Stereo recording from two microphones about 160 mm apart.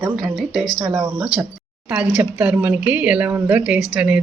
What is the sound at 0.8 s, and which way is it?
A woman's voice, 15° right (ahead or behind).